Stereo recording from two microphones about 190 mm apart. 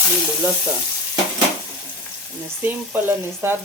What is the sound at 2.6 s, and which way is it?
Frying, 10° right (ahead or behind).